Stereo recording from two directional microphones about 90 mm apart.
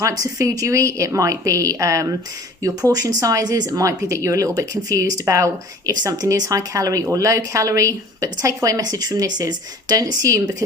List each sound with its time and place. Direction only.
0.0 s speech: 40° right (ahead or behind)